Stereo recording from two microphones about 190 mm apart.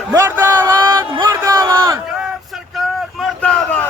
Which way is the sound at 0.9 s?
25° right (ahead or behind).